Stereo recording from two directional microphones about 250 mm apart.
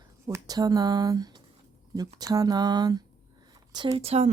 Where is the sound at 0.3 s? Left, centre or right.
Centre.